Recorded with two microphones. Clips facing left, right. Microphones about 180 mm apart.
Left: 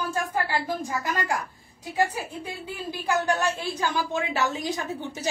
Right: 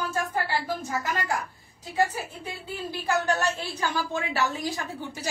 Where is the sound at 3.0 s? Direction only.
15° left (ahead or behind).